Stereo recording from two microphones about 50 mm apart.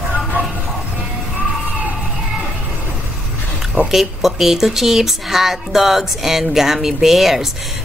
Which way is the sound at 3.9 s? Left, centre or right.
Centre.